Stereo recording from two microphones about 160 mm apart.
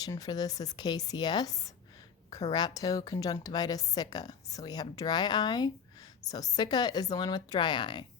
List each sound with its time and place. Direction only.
0.0 s a woman's voice: 25° left (ahead or behind)